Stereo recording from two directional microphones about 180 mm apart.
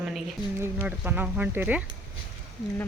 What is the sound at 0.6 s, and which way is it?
Speech, 10° right (ahead or behind).